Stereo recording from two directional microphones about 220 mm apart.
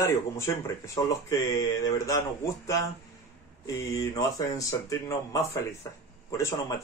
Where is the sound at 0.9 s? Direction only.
15° left (ahead or behind).